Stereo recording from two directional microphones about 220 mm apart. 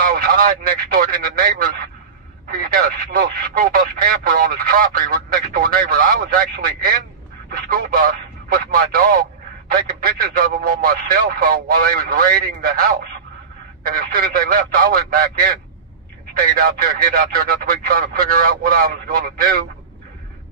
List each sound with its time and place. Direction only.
0.1 s speech: 40° right (ahead or behind)
7.5 s a sound: 40° right (ahead or behind)
13.8 s speech: 40° right (ahead or behind)